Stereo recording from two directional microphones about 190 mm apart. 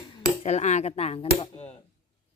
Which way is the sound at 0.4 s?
35° left (ahead or behind).